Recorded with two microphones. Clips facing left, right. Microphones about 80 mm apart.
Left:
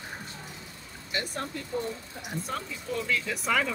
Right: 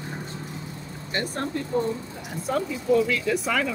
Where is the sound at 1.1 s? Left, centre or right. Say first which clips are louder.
Right 4 dB; right.